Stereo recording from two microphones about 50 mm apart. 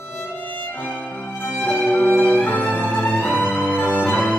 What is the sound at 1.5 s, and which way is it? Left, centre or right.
Music, left.